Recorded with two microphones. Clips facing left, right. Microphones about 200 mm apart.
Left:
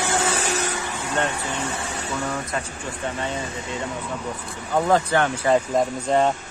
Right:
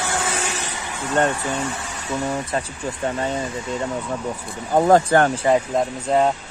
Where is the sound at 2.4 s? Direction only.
35° right (ahead or behind).